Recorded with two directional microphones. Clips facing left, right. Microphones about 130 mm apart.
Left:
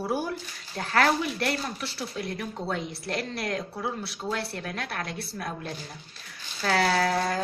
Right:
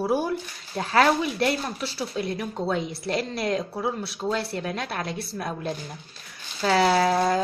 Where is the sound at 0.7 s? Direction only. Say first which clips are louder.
Right 4 dB; 15° right (ahead or behind).